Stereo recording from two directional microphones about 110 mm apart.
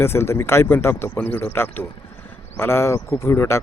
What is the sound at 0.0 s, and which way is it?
Speech, 20° left (ahead or behind).